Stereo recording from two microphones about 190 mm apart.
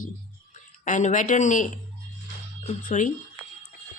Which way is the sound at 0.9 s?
40° left (ahead or behind).